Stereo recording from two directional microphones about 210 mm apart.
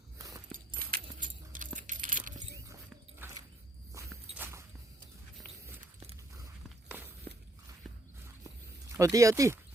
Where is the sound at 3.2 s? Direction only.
15° right (ahead or behind).